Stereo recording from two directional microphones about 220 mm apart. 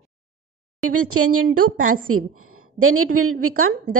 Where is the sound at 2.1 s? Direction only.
75° right (ahead or behind).